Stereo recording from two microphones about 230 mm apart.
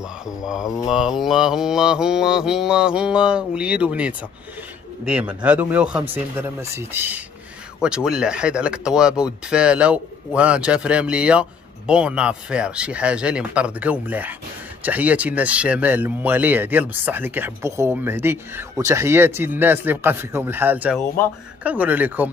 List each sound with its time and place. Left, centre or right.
0.4 s speech: centre